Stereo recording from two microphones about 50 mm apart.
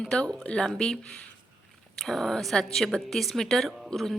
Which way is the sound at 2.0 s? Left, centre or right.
Centre.